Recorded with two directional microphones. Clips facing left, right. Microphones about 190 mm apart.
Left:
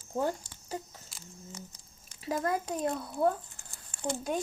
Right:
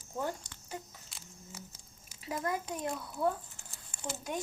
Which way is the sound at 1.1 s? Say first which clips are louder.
Left 4 dB; 5° right (ahead or behind).